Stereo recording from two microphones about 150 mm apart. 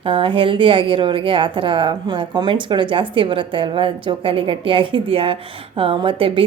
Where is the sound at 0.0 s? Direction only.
35° right (ahead or behind).